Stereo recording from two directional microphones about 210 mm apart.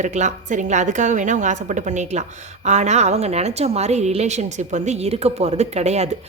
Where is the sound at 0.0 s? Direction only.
35° right (ahead or behind).